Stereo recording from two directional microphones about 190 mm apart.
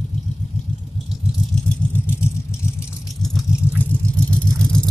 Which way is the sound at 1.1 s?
Centre (ahead or behind).